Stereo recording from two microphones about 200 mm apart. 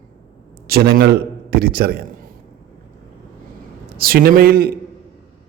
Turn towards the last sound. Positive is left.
turn(degrees=-50)  # may be behind; listen again after turning